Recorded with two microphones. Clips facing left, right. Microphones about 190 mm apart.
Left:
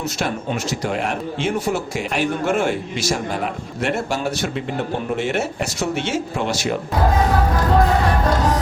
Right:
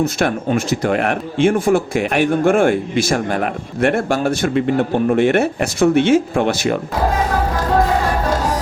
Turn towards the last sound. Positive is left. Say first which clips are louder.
# right 5 dB
turn(degrees=-55)  # may be behind; listen again after turning